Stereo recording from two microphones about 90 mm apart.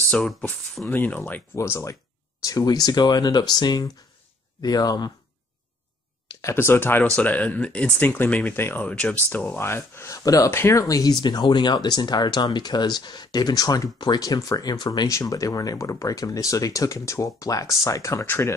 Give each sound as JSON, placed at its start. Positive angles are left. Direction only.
{"t": 0.1, "sound": "speech", "side_deg": 5}
{"t": 0.8, "sound": "speech", "side_deg": 20}
{"t": 1.5, "sound": "speech", "side_deg": 30}
{"t": 2.4, "sound": "speech", "side_deg": 40}
{"t": 6.4, "sound": "speech", "side_deg": 25}
{"t": 9.5, "sound": "speech", "side_deg": 30}
{"t": 14.2, "sound": "speech", "side_deg": 40}
{"t": 15.0, "sound": "speech", "side_deg": 40}
{"t": 18.2, "sound": "speech", "side_deg": 25}